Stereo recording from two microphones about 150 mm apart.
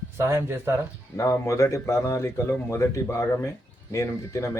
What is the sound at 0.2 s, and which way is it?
Speech, 15° right (ahead or behind).